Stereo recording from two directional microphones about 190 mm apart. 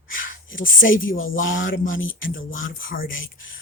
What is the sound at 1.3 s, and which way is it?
Speech, 45° left (ahead or behind).